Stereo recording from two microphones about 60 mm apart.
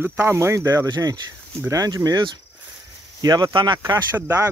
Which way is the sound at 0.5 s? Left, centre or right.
Right.